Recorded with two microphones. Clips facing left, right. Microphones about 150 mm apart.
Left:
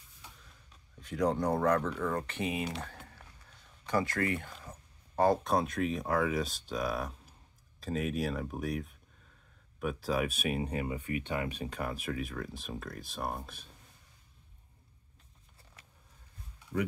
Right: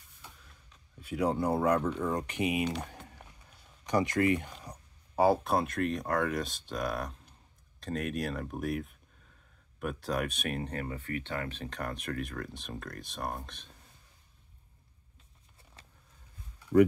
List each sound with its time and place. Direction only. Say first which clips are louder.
1.0 s speech: even; 10° right (ahead or behind)
2.8 s a sound: right 2 dB; 15° right (ahead or behind)
4.6 s speech: right 2 dB; 10° right (ahead or behind); by 13.7 s 5° left (ahead or behind)
15.8 s vehicle: right 3 dB; 30° right (ahead or behind)